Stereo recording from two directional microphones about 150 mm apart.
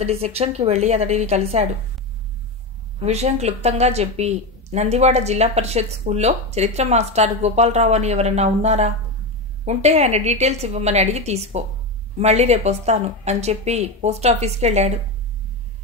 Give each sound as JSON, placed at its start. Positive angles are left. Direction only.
{"t": 0.0, "sound": "a woman's voice", "side_deg": -45}
{"t": 3.0, "sound": "a woman's voice", "side_deg": -45}